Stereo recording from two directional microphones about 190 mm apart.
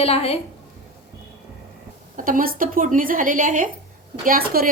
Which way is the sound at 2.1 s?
45° right (ahead or behind).